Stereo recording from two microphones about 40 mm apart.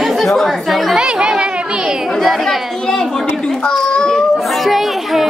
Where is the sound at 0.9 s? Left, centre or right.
Right.